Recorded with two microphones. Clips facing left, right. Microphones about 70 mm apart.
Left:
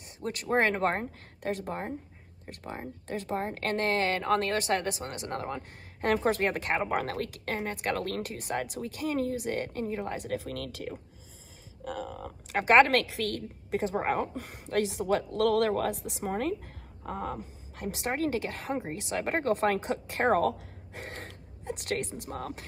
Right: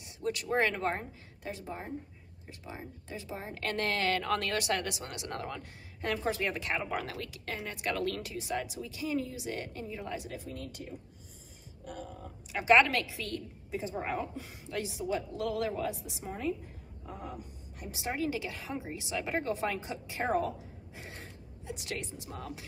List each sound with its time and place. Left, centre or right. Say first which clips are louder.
0.0 s speech: right 1 dB; left
3.7 s speech: left 3 dB; left
5.9 s speech: left 6 dB; left
10.4 s speech: left 5 dB; left
12.5 s speech: left 3 dB; left
13.9 s speech: left 6 dB; left
17.0 s a woman's voice: left 8 dB; left